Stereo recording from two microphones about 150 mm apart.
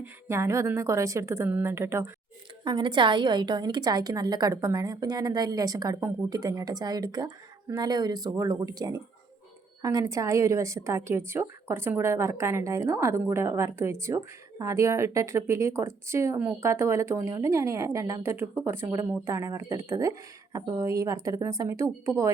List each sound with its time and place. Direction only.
0.0 s a woman's voice: 20° right (ahead or behind)
2.6 s a woman's voice: 30° right (ahead or behind)